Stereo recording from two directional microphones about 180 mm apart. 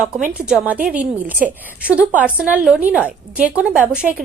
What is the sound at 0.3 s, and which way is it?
A woman's voice, 5° right (ahead or behind).